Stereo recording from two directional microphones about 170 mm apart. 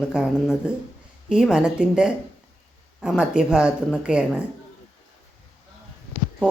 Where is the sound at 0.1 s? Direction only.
5° right (ahead or behind).